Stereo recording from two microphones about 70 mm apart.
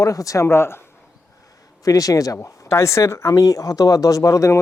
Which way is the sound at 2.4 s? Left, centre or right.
Left.